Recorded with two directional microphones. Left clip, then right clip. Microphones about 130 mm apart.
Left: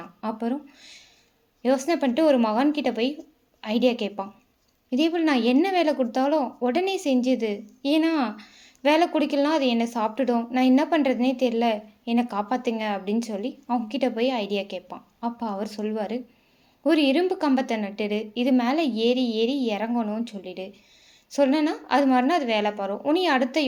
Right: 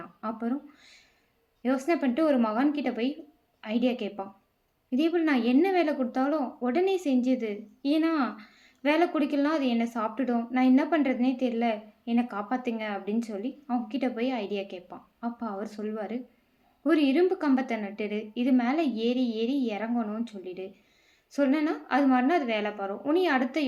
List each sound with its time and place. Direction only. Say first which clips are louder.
0.2 s speech: left 4 dB; 25° left (ahead or behind)